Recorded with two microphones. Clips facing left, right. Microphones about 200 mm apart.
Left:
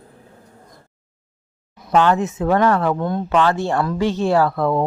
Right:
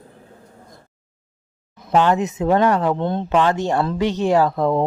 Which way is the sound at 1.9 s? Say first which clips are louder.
Left 1 dB; 15° right (ahead or behind).